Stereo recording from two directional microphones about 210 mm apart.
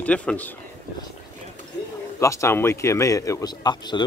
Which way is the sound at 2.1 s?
15° left (ahead or behind).